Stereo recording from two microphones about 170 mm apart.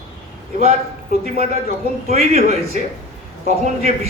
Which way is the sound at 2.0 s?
40° right (ahead or behind).